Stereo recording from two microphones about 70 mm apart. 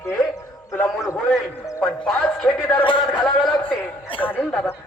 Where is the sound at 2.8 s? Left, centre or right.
Left.